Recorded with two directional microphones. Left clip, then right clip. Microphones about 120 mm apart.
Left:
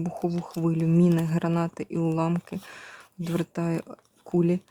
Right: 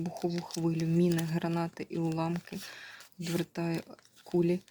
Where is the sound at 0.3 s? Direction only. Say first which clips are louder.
Left 4 dB; 25° left (ahead or behind).